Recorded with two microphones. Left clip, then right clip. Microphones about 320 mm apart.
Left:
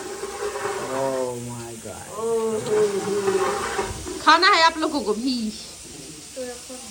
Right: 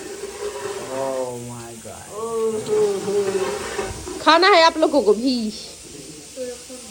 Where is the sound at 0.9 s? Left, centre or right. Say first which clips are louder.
Right 1 dB; left.